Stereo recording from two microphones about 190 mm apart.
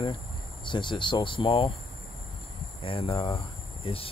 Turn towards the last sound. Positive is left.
turn(degrees=30)  # may be behind; listen again after turning